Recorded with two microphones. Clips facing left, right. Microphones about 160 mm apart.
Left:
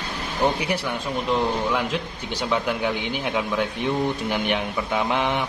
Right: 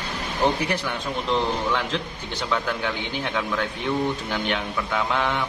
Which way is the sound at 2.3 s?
10° left (ahead or behind).